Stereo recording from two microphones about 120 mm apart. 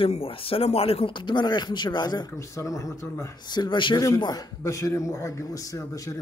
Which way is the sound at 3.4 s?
35° left (ahead or behind).